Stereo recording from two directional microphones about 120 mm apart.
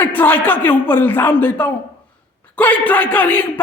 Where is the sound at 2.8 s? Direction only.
15° left (ahead or behind).